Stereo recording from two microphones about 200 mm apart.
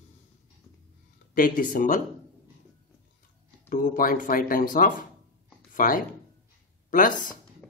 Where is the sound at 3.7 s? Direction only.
45° left (ahead or behind).